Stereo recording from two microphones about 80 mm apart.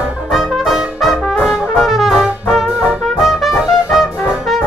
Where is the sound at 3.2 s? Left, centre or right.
Centre.